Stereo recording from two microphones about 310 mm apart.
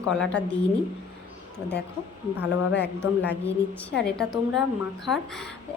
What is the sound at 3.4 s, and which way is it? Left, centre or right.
A woman's voice, centre.